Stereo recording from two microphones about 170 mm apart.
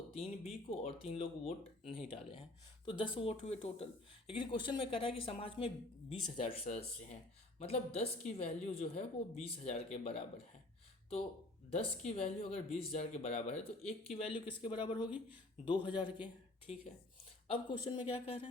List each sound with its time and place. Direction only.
0.2 s speech: 40° left (ahead or behind)
11.7 s speech: 35° left (ahead or behind)